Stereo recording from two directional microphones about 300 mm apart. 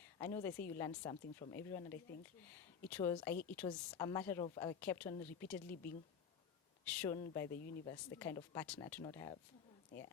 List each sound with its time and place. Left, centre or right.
0.2 s speech: centre
5.7 s speech: left
6.8 s speech: centre
7.5 s speech: left
7.9 s speech: centre